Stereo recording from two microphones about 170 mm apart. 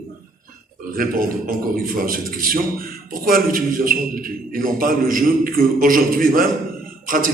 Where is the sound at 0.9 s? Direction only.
55° right (ahead or behind).